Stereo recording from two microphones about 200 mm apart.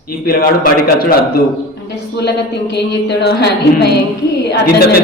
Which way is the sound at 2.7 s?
55° left (ahead or behind).